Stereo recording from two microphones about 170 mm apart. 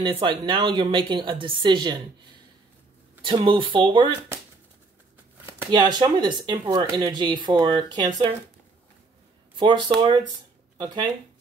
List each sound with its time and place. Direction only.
0.0 s a woman's voice: 30° right (ahead or behind)
3.3 s speech: 30° right (ahead or behind)
5.7 s a woman's voice: 25° right (ahead or behind)
9.6 s speech: 25° right (ahead or behind)